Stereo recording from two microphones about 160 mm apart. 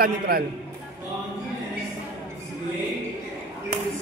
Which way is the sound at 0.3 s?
70° right (ahead or behind).